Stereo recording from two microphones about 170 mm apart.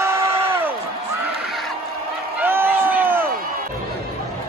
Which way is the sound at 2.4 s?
15° right (ahead or behind).